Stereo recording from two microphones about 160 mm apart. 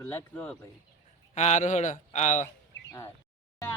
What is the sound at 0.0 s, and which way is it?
Speech, 10° left (ahead or behind).